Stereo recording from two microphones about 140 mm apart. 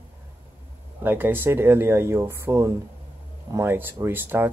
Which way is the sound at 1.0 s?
15° right (ahead or behind).